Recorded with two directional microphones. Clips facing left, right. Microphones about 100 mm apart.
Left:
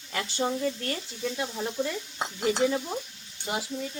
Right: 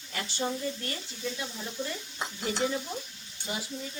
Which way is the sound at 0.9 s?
60° left (ahead or behind).